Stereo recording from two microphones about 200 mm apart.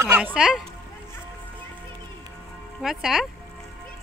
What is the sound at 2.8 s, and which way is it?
Speech, centre (ahead or behind).